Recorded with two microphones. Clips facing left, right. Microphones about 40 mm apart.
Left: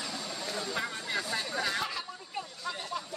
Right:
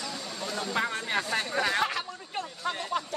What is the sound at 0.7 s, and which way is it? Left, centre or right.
Speech, right.